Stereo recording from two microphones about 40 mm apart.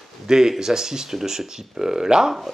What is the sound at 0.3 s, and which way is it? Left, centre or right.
Speech, centre.